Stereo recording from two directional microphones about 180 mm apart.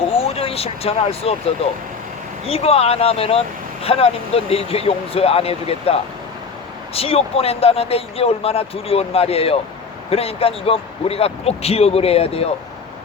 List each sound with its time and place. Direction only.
0.2 s speech: 30° left (ahead or behind)